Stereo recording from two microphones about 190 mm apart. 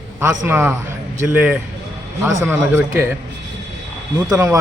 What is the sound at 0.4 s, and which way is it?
Speech, 10° right (ahead or behind).